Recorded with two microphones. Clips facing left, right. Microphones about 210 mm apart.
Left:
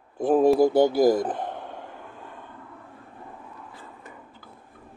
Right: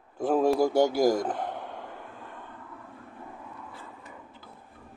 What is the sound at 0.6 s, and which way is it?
Speech, 10° right (ahead or behind).